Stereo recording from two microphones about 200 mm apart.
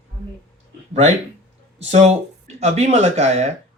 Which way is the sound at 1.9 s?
30° right (ahead or behind).